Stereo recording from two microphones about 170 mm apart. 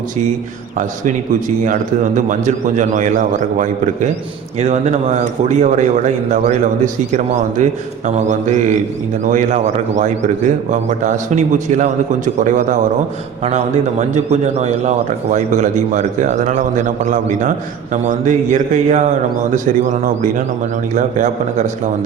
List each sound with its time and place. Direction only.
0.8 s a man's voice: 50° right (ahead or behind)
14.1 s a man's voice: 40° right (ahead or behind)